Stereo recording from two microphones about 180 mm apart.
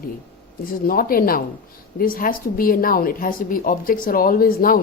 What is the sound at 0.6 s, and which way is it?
Speech, 55° left (ahead or behind).